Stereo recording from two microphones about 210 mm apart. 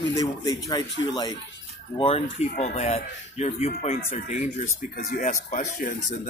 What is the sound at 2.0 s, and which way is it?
Speech, 25° left (ahead or behind).